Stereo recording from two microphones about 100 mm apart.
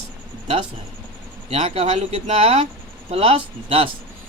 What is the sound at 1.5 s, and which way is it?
Speech, 90° right.